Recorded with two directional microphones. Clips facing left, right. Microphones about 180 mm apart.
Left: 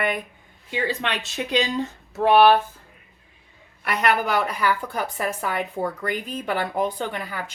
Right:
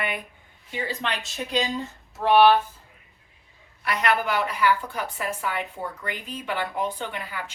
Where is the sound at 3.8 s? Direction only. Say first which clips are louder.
Left 2 dB; 50° left (ahead or behind).